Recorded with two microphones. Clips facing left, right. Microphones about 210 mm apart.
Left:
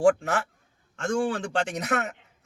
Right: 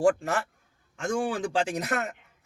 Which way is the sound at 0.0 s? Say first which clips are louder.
Left 2 dB; centre (ahead or behind).